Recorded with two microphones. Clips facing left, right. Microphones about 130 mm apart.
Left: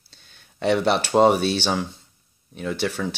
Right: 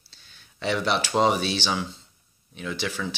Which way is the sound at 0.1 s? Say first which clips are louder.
Left 2 dB; 55° left (ahead or behind).